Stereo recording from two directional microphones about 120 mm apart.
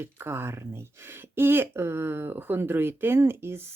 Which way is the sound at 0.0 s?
20° right (ahead or behind).